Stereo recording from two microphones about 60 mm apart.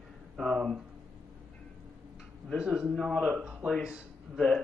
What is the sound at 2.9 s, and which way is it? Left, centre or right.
Speech, centre.